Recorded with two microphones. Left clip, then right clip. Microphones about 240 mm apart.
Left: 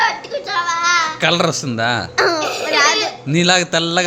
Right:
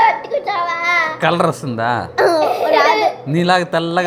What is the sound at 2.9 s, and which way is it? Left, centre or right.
Speech, left.